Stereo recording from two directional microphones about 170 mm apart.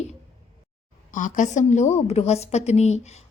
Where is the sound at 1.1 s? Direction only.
50° left (ahead or behind).